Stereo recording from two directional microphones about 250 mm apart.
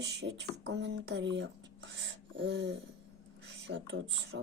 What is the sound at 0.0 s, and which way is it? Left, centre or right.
Speech, right.